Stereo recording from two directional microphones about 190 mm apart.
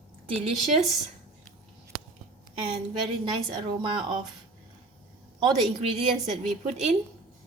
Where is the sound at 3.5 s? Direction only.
25° right (ahead or behind).